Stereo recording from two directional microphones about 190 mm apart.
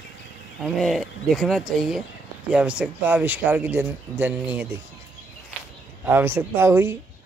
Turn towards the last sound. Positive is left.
turn(degrees=-15)  # may be behind; listen again after turning